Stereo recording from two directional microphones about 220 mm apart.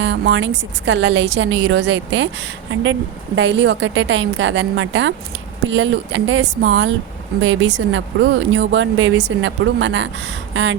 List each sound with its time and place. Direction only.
0.0 s speech: 55° right (ahead or behind)